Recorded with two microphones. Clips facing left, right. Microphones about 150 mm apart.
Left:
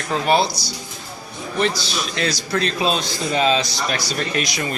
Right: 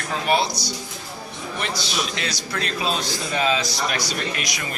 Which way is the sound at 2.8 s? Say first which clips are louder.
Left 4 dB; 20° left (ahead or behind).